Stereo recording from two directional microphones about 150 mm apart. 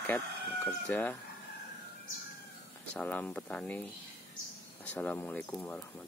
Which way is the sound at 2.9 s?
10° left (ahead or behind).